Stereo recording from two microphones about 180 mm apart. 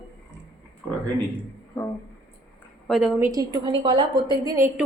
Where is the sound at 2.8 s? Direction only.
Centre (ahead or behind).